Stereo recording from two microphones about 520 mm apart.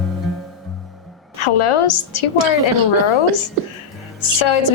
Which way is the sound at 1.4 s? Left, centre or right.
Left.